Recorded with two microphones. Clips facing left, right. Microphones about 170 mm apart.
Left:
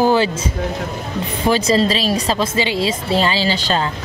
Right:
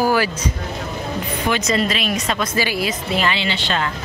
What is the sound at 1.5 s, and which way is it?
A woman's voice, 30° left (ahead or behind).